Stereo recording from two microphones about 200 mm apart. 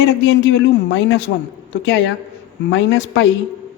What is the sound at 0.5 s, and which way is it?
A man's voice, 65° left (ahead or behind).